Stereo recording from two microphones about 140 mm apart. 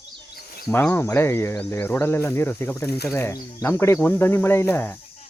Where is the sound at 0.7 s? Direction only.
15° left (ahead or behind).